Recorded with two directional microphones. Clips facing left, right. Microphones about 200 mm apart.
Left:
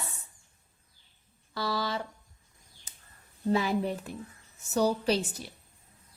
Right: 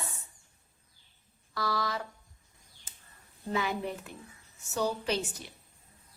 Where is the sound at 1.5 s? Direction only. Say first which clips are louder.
Left 1 dB; 30° left (ahead or behind).